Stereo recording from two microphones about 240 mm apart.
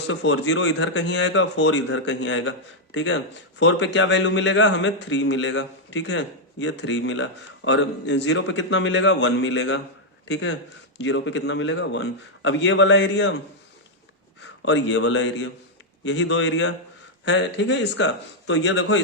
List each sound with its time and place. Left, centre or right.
0.1 s a man's voice: left
14.6 s a man's voice: left